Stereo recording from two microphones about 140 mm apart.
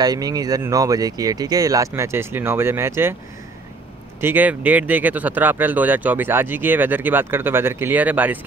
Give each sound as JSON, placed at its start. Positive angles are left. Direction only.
{"t": 0.0, "sound": "speech", "side_deg": -30}
{"t": 4.2, "sound": "speech", "side_deg": -15}